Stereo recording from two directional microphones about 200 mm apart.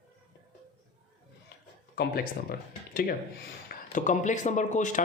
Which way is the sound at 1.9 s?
50° left (ahead or behind).